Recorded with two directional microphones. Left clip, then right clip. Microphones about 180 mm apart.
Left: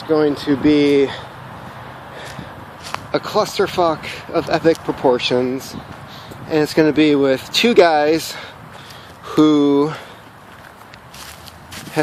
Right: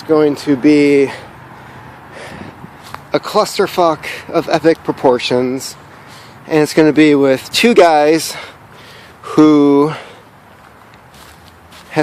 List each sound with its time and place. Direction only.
0.1 s speech: 55° right (ahead or behind)
3.1 s speech: 45° right (ahead or behind)